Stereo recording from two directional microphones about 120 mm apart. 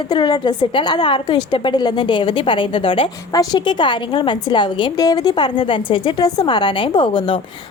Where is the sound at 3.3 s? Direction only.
35° left (ahead or behind).